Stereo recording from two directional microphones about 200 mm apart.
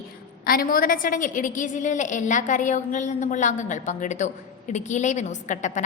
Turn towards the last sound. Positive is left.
turn(degrees=35)  # may be behind; listen again after turning